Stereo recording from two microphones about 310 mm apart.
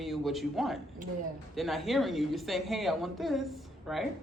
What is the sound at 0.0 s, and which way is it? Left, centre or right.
A man's voice, centre.